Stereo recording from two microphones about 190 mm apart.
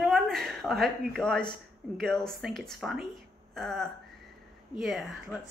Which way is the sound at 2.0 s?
5° left (ahead or behind).